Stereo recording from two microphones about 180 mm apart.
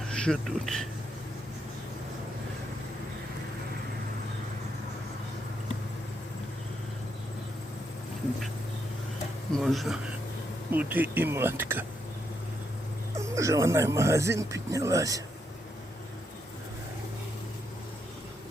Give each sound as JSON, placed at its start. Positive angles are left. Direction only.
{"t": 0.1, "sound": "speech", "side_deg": 5}
{"t": 9.6, "sound": "speech", "side_deg": 0}
{"t": 13.1, "sound": "speech", "side_deg": -15}